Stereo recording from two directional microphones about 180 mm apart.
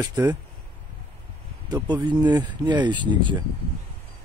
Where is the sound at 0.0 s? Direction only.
20° right (ahead or behind).